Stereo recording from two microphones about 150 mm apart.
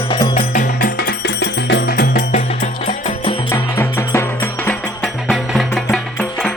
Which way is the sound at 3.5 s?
15° left (ahead or behind).